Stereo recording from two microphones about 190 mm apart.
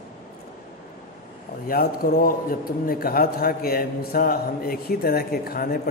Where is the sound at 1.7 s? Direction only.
50° left (ahead or behind).